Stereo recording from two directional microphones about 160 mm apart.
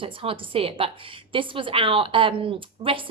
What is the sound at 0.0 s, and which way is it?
A woman's voice, 35° right (ahead or behind).